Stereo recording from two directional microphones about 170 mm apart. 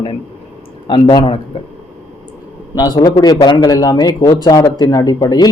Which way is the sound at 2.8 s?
25° left (ahead or behind).